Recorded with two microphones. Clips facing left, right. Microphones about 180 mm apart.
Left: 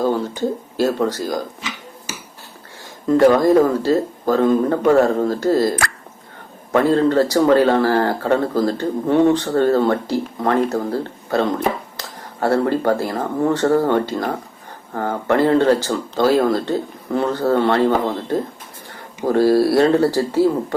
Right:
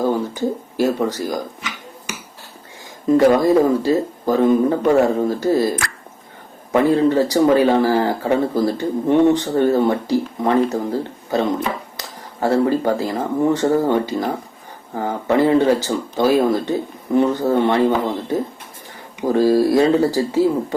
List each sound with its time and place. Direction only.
0.0 s speech: 15° right (ahead or behind)
3.1 s speech: 10° right (ahead or behind)